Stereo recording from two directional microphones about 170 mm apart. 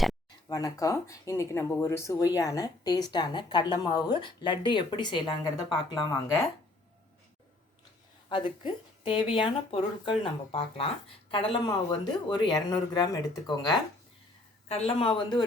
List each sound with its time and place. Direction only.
0.4 s speech: 20° left (ahead or behind)
8.3 s speech: 30° left (ahead or behind)
14.7 s speech: 35° left (ahead or behind)